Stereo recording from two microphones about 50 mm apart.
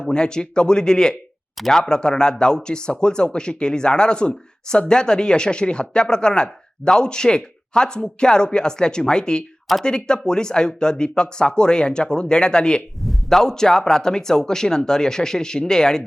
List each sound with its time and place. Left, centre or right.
0.1 s speech: centre
1.5 s speech: centre
1.8 s speech: centre
13.0 s a sound: centre
13.4 s speech: centre